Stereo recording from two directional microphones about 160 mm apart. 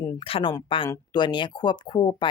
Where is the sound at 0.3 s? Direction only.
35° left (ahead or behind).